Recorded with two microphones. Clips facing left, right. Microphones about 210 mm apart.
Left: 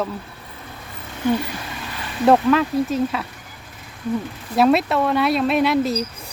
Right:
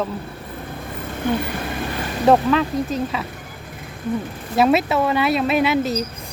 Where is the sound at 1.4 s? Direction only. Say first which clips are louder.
Right 5 dB; 50° right (ahead or behind).